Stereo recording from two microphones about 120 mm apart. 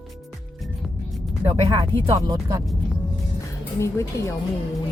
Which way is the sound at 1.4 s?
45° right (ahead or behind).